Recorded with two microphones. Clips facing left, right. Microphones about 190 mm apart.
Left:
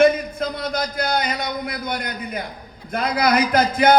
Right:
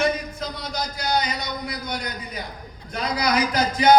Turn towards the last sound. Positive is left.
turn(degrees=55)  # may be behind; listen again after turning